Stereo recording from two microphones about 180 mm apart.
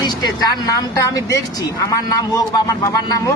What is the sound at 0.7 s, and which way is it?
A man's voice, 20° left (ahead or behind).